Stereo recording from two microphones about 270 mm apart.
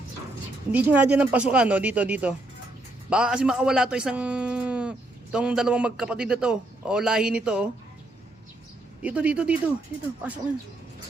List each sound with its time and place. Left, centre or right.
0.7 s speech: centre
9.0 s speech: centre